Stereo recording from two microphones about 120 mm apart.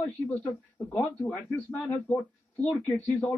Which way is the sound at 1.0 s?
15° left (ahead or behind).